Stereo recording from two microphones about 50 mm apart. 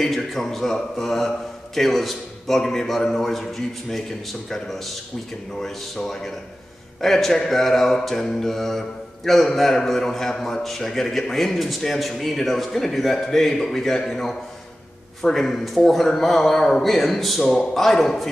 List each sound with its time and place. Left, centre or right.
0.0 s a man's voice: centre
0.7 s mantra: centre
1.8 s a man's voice: centre
5.6 s mantra: centre
7.0 s a man's voice: centre
7.4 s mantra: centre
15.9 s a man's voice: centre